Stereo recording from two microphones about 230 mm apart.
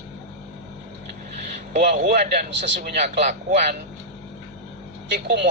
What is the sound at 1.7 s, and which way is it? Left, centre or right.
Speech, right.